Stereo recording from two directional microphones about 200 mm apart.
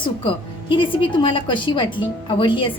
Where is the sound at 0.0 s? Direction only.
25° left (ahead or behind).